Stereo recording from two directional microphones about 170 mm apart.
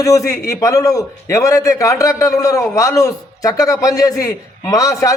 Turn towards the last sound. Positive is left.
turn(degrees=20)  # may be behind; listen again after turning